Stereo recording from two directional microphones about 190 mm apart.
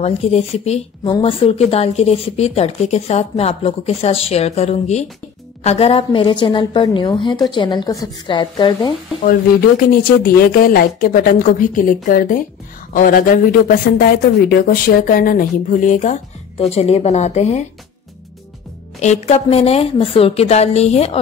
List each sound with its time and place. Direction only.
0.0 s a woman's voice: 35° left (ahead or behind)
9.2 s a woman's voice: 50° left (ahead or behind)
18.9 s a woman's voice: 35° left (ahead or behind)